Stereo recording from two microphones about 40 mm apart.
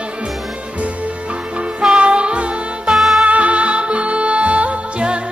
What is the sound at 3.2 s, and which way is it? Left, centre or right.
Music, right.